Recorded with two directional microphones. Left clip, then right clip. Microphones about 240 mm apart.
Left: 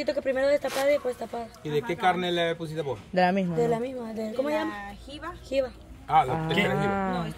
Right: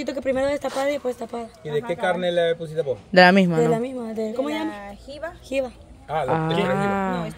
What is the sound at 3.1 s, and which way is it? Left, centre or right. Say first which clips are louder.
Speech: right 9 dB; right.